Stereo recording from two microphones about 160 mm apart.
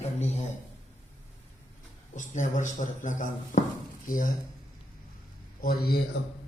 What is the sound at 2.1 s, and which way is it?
Speech, 50° left (ahead or behind).